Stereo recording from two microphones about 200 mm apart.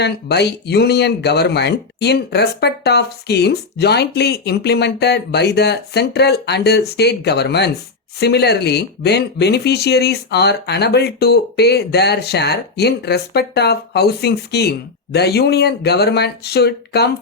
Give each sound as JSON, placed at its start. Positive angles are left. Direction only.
{"t": 0.0, "sound": "speech", "side_deg": 55}